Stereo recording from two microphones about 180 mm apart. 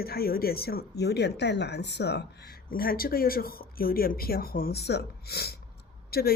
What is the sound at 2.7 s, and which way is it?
Speech, 55° left (ahead or behind).